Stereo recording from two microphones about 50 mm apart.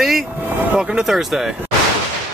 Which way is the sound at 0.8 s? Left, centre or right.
Centre.